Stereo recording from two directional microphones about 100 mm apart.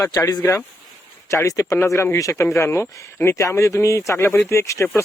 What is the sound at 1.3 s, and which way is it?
Speech, 30° left (ahead or behind).